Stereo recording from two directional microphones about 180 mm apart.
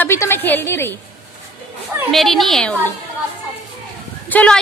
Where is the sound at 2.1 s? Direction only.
Centre (ahead or behind).